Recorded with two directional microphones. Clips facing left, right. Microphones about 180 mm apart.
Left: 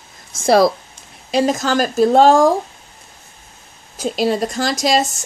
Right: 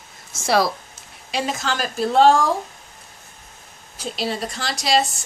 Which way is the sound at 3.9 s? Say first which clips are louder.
Left 8 dB; 45° left (ahead or behind).